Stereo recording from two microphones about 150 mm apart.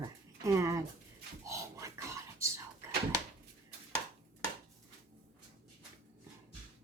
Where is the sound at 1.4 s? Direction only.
20° right (ahead or behind).